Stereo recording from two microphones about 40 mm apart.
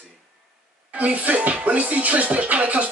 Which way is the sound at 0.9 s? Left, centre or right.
Right.